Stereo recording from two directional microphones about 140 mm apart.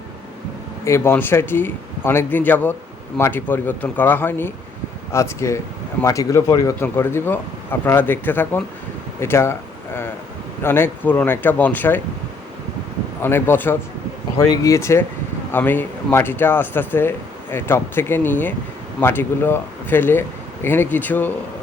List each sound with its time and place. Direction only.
0.9 s speech: 20° left (ahead or behind)
13.2 s speech: 15° left (ahead or behind)